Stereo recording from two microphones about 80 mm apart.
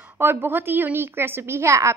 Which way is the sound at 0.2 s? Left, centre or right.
Right.